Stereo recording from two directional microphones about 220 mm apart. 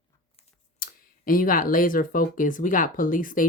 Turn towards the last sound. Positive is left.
turn(degrees=40)  # may be behind; listen again after turning